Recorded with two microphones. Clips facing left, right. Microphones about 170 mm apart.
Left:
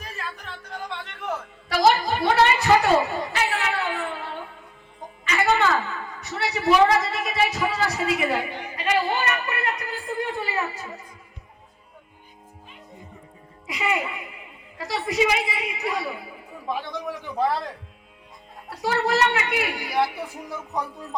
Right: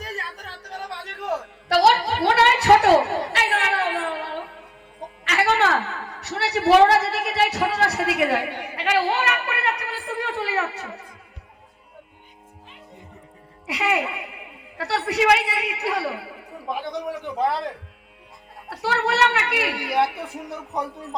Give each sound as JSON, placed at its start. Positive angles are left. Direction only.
{"t": 0.4, "sound": "music", "side_deg": -35}
{"t": 1.7, "sound": "a sound", "side_deg": -65}
{"t": 13.7, "sound": "a man's voice", "side_deg": -70}
{"t": 16.7, "sound": "a man's voice", "side_deg": -15}
{"t": 18.7, "sound": "a woman's voice", "side_deg": -65}